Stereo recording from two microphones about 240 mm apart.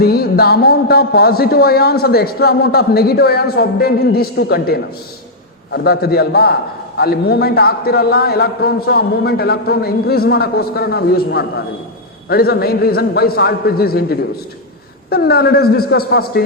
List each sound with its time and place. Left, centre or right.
0.0 s a man's voice: left